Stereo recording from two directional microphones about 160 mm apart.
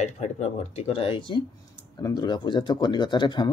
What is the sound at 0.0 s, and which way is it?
Speech, 45° left (ahead or behind).